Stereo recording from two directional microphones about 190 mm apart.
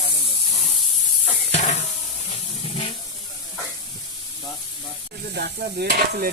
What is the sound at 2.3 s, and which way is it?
Steam, 30° left (ahead or behind).